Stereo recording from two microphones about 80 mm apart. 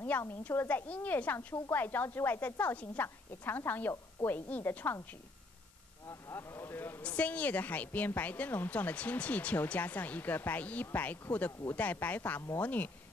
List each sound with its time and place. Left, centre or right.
0.4 s a woman's voice: left
6.0 s speech: left
7.0 s a woman's voice: centre